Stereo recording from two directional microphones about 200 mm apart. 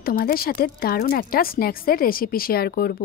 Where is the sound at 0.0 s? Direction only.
50° left (ahead or behind).